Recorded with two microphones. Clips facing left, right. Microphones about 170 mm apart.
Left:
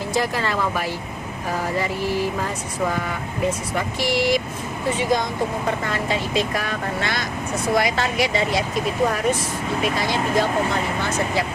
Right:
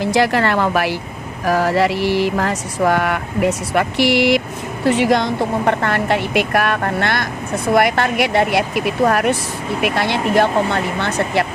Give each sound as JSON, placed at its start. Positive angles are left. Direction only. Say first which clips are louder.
{"t": 0.0, "sound": "speech", "louder": "right 7 dB", "side_deg": -80}
{"t": 1.5, "sound": "speech", "louder": "right 9 dB", "side_deg": -90}